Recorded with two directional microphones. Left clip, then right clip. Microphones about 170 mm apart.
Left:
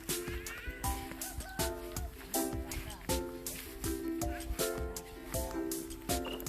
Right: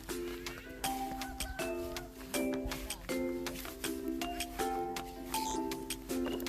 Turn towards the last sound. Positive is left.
turn(degrees=0)  # may be behind; listen again after turning